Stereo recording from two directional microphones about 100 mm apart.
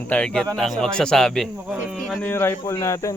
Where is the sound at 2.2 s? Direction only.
25° left (ahead or behind).